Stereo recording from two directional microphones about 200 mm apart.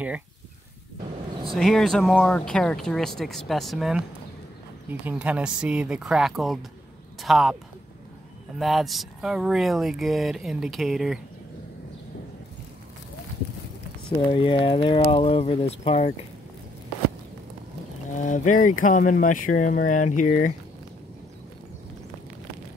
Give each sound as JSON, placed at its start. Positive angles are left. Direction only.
{"t": 1.5, "sound": "speech", "side_deg": 0}
{"t": 8.5, "sound": "speech", "side_deg": 0}
{"t": 14.0, "sound": "speech", "side_deg": 25}
{"t": 18.1, "sound": "speech", "side_deg": 40}